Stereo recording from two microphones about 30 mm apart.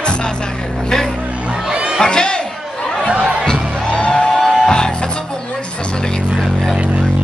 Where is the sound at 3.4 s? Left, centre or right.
Left.